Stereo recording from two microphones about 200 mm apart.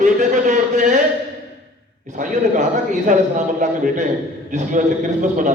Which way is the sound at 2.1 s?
40° right (ahead or behind).